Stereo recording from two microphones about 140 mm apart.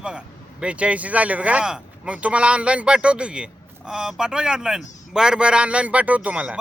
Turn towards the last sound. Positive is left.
turn(degrees=-10)  # may be behind; listen again after turning